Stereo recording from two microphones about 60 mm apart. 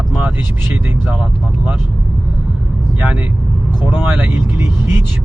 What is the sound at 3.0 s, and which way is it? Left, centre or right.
Speech, right.